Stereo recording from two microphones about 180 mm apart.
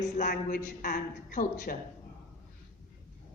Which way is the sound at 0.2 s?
45° left (ahead or behind).